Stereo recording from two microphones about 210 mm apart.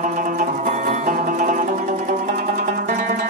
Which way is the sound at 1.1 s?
40° right (ahead or behind).